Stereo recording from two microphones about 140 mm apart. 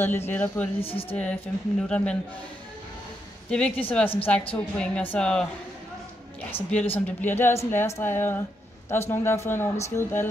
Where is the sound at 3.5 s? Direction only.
5° left (ahead or behind).